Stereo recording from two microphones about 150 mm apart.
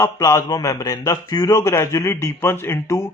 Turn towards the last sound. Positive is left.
turn(degrees=15)  # may be behind; listen again after turning